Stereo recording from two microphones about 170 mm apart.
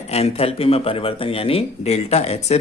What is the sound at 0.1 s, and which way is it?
A man's voice, 40° left (ahead or behind).